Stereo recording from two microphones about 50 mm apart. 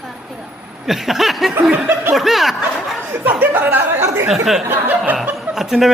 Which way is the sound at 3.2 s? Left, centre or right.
Right.